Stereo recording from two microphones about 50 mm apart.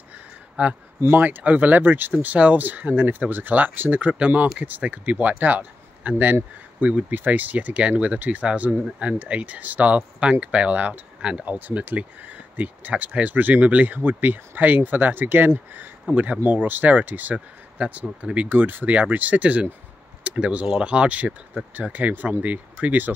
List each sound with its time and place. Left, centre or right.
0.6 s speech: right
4.0 s speech: right
7.1 s speech: right; by 11.4 s centre
11.4 s speech: right